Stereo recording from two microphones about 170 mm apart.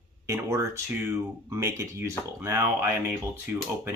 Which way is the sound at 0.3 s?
15° right (ahead or behind).